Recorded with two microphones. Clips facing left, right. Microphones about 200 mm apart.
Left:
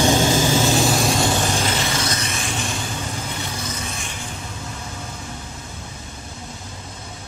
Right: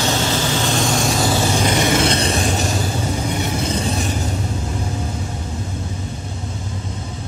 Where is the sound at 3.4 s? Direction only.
30° right (ahead or behind).